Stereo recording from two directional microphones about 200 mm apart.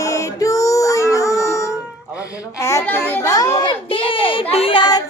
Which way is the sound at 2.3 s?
15° left (ahead or behind).